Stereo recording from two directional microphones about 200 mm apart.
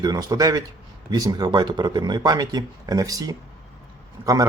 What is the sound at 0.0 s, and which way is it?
Speech, 20° right (ahead or behind).